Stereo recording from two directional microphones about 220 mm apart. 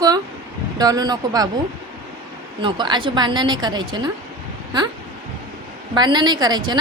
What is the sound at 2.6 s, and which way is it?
Speech, 20° right (ahead or behind).